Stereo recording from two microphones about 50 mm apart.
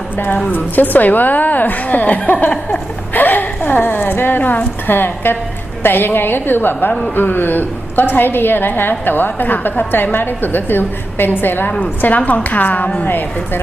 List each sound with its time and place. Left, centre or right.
0.3 s a woman's voice: left